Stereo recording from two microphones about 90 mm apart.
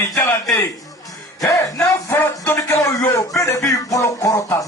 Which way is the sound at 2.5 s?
30° left (ahead or behind).